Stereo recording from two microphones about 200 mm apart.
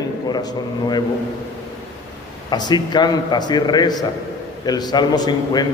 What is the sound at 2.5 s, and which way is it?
A man's voice, 20° left (ahead or behind).